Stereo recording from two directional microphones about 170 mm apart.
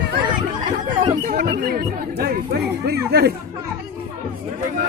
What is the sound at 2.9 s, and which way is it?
Chatter, 70° right (ahead or behind).